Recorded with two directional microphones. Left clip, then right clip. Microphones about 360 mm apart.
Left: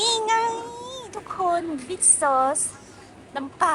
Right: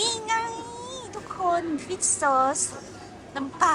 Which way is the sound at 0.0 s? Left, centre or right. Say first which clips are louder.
Left 5 dB; centre.